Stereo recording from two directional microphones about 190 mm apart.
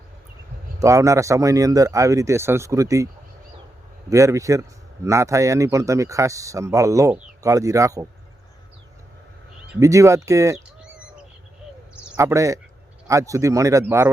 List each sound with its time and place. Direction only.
0.8 s speech: 15° right (ahead or behind)
4.1 s speech: 15° right (ahead or behind)
9.8 s speech: 15° right (ahead or behind)
12.1 s a man's voice: 15° right (ahead or behind)